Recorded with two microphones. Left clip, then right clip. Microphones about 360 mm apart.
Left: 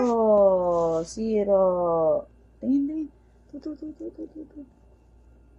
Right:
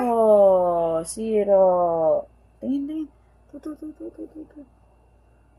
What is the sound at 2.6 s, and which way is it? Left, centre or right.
Speech, centre.